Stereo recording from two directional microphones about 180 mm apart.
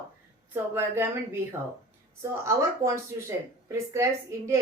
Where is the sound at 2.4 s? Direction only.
15° right (ahead or behind).